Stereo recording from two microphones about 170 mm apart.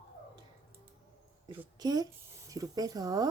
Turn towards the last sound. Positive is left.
turn(degrees=-20)  # may be behind; listen again after turning